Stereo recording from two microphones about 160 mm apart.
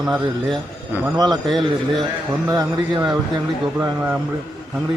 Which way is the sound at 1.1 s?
25° right (ahead or behind).